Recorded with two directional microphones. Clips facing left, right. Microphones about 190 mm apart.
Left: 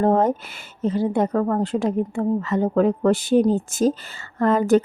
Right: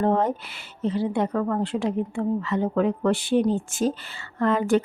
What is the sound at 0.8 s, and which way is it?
A woman's voice, 45° left (ahead or behind).